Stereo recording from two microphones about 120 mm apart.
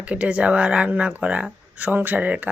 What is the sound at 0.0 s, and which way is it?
Speech, 10° right (ahead or behind).